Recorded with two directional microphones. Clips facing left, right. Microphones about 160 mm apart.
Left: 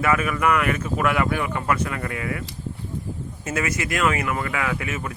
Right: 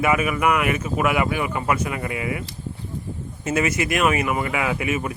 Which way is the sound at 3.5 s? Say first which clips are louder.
Right 4 dB; 20° right (ahead or behind).